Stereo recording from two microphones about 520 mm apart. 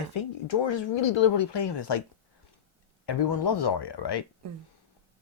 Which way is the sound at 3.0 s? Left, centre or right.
Left.